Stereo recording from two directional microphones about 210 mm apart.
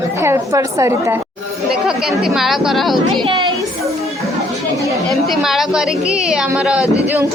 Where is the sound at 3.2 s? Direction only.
25° right (ahead or behind).